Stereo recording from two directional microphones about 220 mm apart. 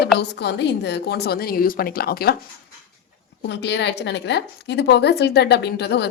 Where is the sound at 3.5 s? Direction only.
50° left (ahead or behind).